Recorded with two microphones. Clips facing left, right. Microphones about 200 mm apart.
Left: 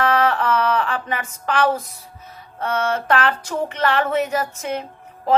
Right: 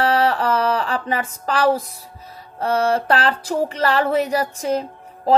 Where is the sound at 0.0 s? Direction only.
35° right (ahead or behind).